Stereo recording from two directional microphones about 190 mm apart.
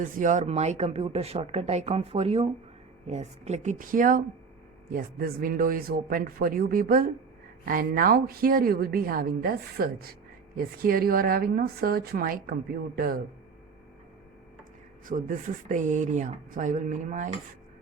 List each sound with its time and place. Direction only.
0.0 s speech: 40° right (ahead or behind)
15.0 s speech: 45° right (ahead or behind)